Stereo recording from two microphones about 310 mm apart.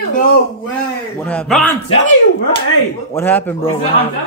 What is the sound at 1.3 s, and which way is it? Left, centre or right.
Speech, centre.